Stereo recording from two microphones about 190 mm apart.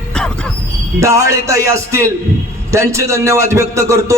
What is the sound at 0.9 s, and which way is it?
A man's voice, 15° right (ahead or behind).